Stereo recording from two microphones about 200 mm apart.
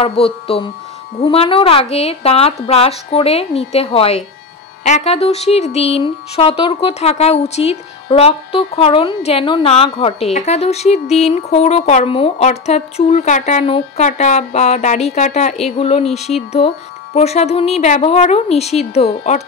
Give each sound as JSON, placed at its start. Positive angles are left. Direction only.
{"t": 0.0, "sound": "a woman's voice", "side_deg": 30}